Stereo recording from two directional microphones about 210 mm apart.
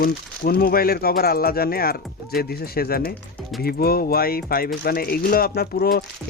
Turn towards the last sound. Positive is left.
turn(degrees=45)  # may be behind; listen again after turning